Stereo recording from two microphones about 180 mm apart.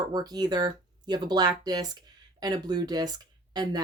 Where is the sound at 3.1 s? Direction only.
20° right (ahead or behind).